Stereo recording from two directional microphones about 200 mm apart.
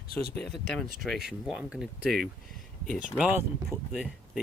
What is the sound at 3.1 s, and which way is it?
Speech, 5° right (ahead or behind).